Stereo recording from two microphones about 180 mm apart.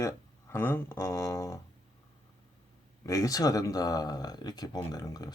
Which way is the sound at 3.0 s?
20° left (ahead or behind).